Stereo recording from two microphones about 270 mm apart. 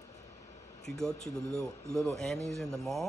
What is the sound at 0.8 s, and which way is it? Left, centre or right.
Speech, centre.